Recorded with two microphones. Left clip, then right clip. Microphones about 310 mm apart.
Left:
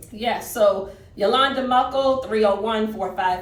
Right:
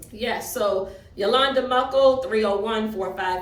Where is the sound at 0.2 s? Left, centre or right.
Centre.